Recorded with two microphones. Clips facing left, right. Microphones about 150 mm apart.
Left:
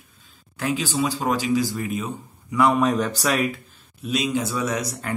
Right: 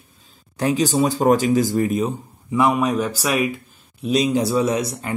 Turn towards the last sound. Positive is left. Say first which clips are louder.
# right 5 dB
turn(degrees=-25)  # may be behind; listen again after turning